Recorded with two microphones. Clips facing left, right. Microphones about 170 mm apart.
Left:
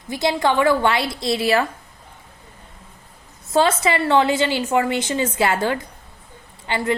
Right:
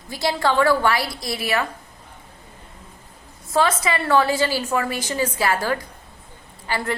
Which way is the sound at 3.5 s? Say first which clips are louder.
Left 3 dB; 25° left (ahead or behind).